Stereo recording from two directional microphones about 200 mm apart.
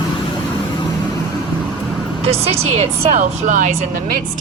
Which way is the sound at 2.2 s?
30° right (ahead or behind).